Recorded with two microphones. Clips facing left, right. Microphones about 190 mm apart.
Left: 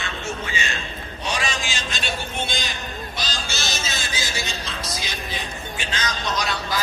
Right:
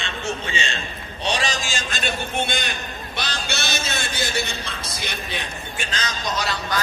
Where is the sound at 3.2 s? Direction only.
65° right (ahead or behind).